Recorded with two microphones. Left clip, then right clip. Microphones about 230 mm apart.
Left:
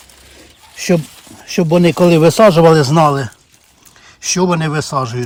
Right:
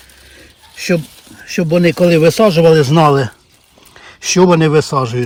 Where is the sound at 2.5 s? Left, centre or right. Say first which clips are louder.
Even; left.